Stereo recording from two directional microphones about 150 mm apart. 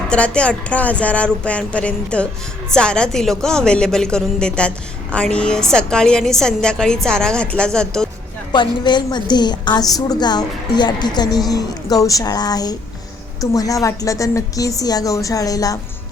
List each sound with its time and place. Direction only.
0.1 s a woman's voice: 5° left (ahead or behind)
8.5 s a woman's voice: 30° left (ahead or behind)